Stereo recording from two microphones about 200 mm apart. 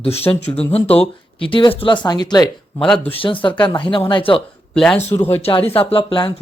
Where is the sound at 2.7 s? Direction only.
5° left (ahead or behind).